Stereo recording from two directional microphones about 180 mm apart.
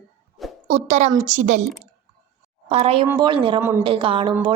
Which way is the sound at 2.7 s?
35° right (ahead or behind).